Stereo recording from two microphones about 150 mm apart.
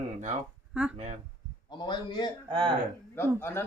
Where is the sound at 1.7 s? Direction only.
30° left (ahead or behind).